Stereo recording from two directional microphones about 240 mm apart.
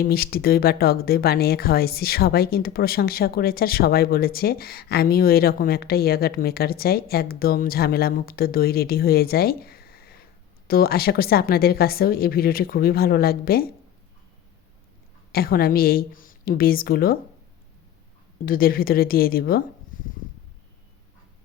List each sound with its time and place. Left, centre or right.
0.0 s speech: left
15.3 s speech: left
18.3 s speech: left